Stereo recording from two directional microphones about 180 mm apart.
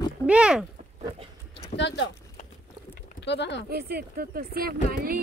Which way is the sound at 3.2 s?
75° left (ahead or behind).